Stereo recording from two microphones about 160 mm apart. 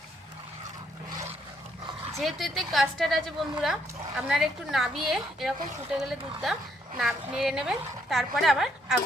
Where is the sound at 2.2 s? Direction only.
Centre (ahead or behind).